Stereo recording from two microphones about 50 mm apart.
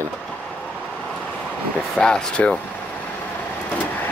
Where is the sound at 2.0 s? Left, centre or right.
Centre.